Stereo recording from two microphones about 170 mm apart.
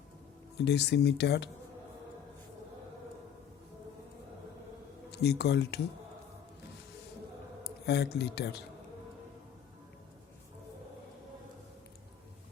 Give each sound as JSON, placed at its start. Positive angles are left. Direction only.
{"t": 0.6, "sound": "speech", "side_deg": 80}
{"t": 5.1, "sound": "speech", "side_deg": 75}
{"t": 7.6, "sound": "speech", "side_deg": 75}